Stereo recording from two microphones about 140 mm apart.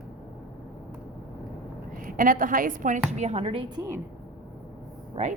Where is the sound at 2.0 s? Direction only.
80° right.